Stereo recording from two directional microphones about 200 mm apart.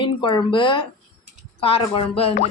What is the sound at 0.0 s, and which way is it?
A woman's voice, 20° left (ahead or behind).